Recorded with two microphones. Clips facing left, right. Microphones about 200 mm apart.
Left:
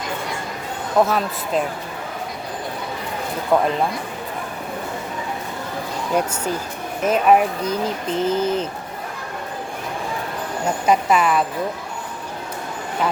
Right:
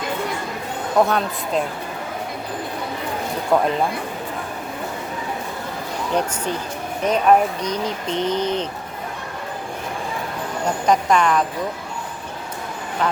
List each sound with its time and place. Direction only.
1.0 s speech: centre (ahead or behind)
3.5 s speech: centre (ahead or behind)
6.1 s speech: 10° left (ahead or behind)
10.8 s speech: 5° left (ahead or behind)